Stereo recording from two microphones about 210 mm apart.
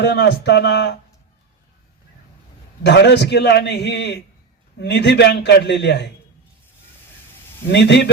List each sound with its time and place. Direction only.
0.0 s a man's voice: 55° left (ahead or behind)
2.8 s a man's voice: 55° left (ahead or behind)
7.7 s a man's voice: 55° left (ahead or behind)